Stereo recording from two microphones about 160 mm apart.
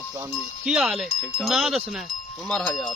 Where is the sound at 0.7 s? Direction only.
5° right (ahead or behind).